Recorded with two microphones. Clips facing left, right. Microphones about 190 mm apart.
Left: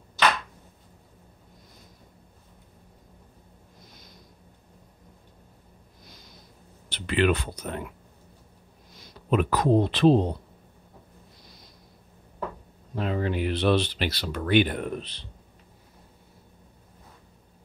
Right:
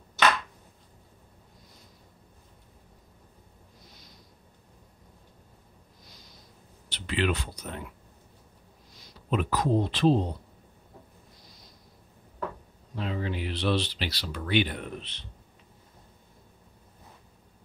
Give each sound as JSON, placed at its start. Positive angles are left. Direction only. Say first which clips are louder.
{"t": 6.9, "sound": "speech", "louder": "left 5 dB", "side_deg": 55}
{"t": 9.3, "sound": "speech", "louder": "left 4 dB", "side_deg": 60}
{"t": 12.9, "sound": "speech", "louder": "left 5 dB", "side_deg": 50}